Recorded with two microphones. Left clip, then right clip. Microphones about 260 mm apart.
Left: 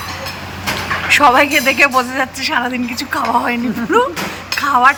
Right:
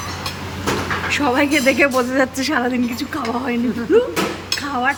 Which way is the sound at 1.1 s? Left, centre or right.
Centre.